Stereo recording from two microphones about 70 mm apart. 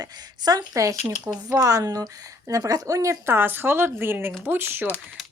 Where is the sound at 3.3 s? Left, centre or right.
Right.